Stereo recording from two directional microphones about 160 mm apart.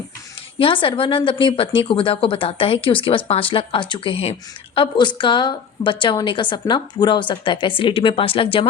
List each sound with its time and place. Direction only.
0.6 s a woman's voice: 35° left (ahead or behind)